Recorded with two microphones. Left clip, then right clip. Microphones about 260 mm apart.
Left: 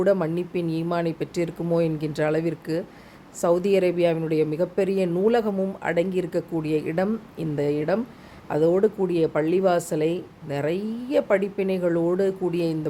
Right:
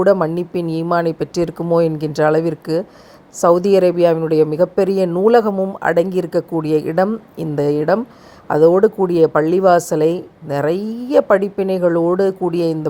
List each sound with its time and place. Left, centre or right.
0.0 s speech: centre